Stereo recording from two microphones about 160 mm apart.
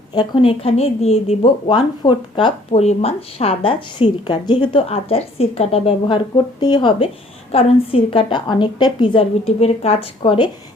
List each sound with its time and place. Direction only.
0.1 s a woman's voice: 30° left (ahead or behind)
6.3 s a woman's voice: 25° left (ahead or behind)